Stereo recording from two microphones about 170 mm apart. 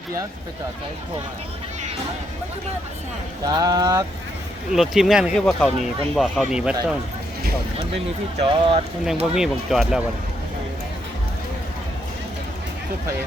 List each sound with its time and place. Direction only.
3.4 s speech: 20° right (ahead or behind)
4.7 s speech: centre (ahead or behind)
8.4 s speech: 30° right (ahead or behind)
9.3 s speech: centre (ahead or behind)